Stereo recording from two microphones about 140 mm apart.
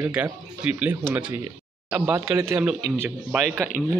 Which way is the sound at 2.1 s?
20° right (ahead or behind).